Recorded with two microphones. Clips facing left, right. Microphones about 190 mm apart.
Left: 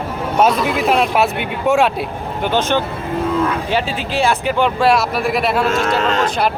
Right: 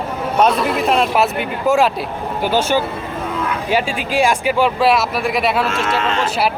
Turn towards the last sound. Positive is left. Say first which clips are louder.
# left 1 dB
turn(degrees=0)  # may be behind; listen again after turning